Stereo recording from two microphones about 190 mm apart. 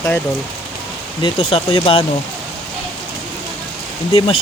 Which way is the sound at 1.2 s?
30° left (ahead or behind).